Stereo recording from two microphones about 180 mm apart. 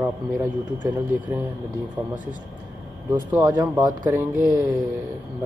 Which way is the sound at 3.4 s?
20° right (ahead or behind).